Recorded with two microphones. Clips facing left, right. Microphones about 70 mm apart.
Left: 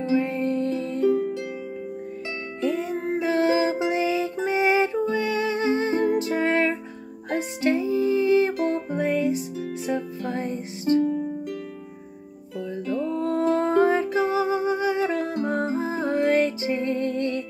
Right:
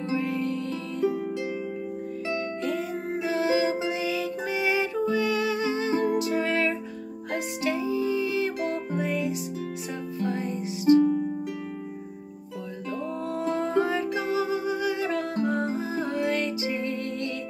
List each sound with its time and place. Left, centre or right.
0.1 s music: left
2.6 s music: left
13.2 s music: left